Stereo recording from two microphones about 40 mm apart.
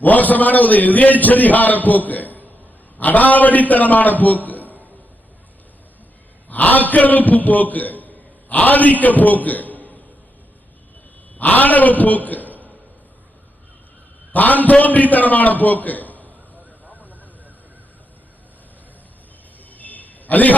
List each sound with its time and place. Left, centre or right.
0.0 s a man's voice: left
6.5 s a man's voice: left
11.3 s a man's voice: left
14.3 s a man's voice: left
16.8 s a sound: right
19.7 s a sound: left